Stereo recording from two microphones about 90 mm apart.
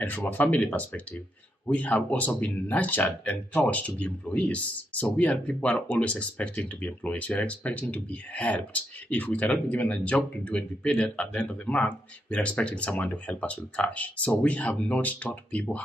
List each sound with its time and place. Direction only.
0.0 s speech: 20° left (ahead or behind)